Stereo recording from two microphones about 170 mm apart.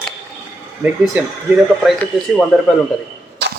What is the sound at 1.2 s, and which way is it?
Speech, 10° right (ahead or behind).